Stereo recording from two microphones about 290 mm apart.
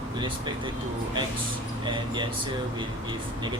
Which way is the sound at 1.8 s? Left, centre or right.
Centre.